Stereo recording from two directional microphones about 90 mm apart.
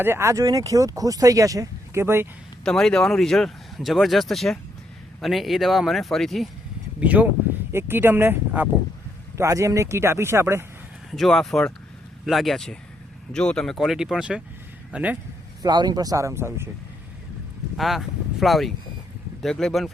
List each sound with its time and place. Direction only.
0.0 s speech: 30° right (ahead or behind)
2.6 s speech: 5° left (ahead or behind)
7.0 s speech: 15° right (ahead or behind)
7.7 s speech: 25° right (ahead or behind)
9.4 s speech: 35° right (ahead or behind)
11.1 s speech: 5° left (ahead or behind); by 15.2 s 15° right (ahead or behind)
15.6 s speech: 50° right (ahead or behind); by 16.6 s 30° right (ahead or behind)
17.7 s speech: centre (ahead or behind)